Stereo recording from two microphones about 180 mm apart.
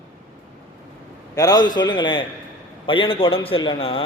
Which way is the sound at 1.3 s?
20° left (ahead or behind).